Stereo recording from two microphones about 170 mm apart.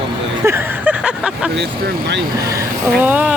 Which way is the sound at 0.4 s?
15° right (ahead or behind).